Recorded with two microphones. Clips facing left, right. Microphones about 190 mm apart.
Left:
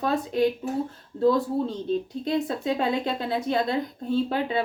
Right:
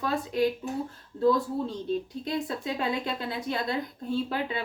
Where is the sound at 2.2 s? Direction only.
25° left (ahead or behind).